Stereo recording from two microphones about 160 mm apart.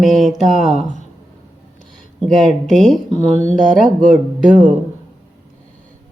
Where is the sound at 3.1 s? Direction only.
45° left (ahead or behind).